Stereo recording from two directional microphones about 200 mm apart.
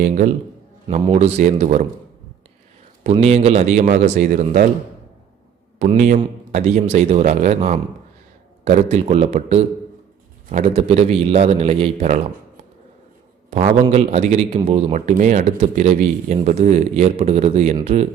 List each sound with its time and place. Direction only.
0.0 s a man's voice: 40° right (ahead or behind)
3.0 s a man's voice: 30° right (ahead or behind)
5.8 s a man's voice: 35° right (ahead or behind)
13.5 s a man's voice: 30° right (ahead or behind)